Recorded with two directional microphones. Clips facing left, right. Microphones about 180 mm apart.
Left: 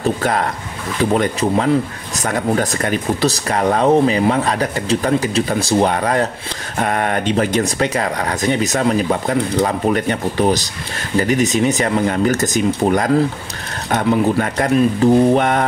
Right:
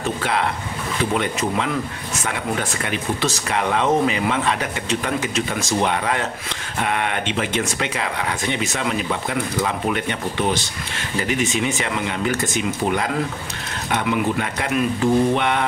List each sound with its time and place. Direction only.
0.0 s speech: 45° left (ahead or behind)